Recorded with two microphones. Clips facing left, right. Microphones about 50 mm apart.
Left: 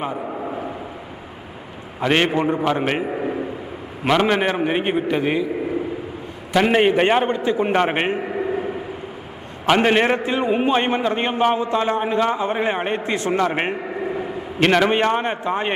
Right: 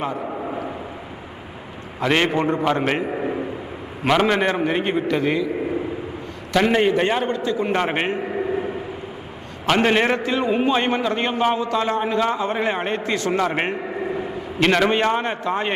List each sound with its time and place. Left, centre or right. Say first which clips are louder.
0.2 s a sound: even; centre
2.0 s a man's voice: left 1 dB; centre
6.7 s a man's voice: left 3 dB; left
8.2 s a sound: even; centre
9.6 s a man's voice: left 2 dB; centre
13.5 s a man's voice: left 1 dB; centre
13.8 s a sound: even; centre
14.6 s a man's voice: left 1 dB; centre
14.9 s a man's voice: left 1 dB; left